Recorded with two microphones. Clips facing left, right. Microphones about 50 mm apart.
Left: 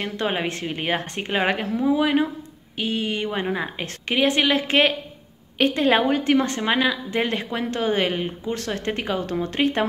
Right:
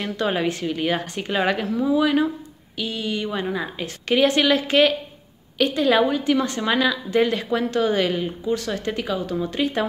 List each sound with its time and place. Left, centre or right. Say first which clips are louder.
0.0 s a woman's voice: right 2 dB; left